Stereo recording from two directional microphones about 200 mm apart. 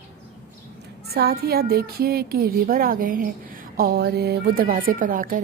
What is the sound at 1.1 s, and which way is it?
A woman's voice, 50° right (ahead or behind).